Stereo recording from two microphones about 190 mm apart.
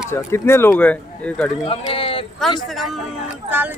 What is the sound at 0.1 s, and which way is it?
Speech, 15° left (ahead or behind).